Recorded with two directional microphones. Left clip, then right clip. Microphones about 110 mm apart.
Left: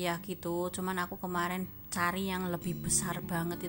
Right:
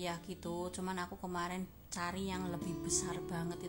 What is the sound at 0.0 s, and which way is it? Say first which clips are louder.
A woman's voice: left 7 dB; 45° left (ahead or behind).